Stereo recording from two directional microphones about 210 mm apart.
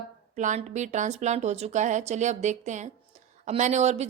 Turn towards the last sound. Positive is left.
turn(degrees=-30)  # may be behind; listen again after turning